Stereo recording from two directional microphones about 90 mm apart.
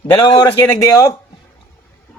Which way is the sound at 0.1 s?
60° left (ahead or behind).